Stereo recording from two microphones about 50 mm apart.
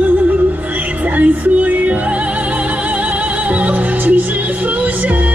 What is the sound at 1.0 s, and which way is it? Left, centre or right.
Music, right.